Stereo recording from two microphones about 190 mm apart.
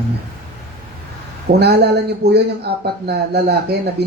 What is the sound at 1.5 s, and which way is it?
Speech, 60° right (ahead or behind).